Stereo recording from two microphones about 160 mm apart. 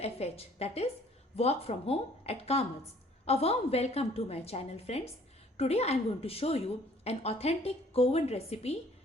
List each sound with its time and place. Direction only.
0.0 s a woman's voice: 40° left (ahead or behind)